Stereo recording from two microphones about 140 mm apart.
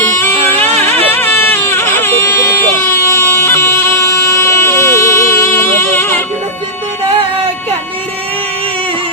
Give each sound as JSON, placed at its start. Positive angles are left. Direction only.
{"t": 0.2, "sound": "music", "side_deg": 15}